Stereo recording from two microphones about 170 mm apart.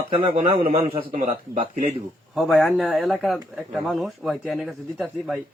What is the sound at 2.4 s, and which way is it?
Speech, centre (ahead or behind).